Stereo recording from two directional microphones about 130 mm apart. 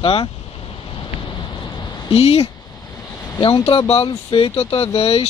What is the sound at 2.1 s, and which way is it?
Speech, 50° left (ahead or behind).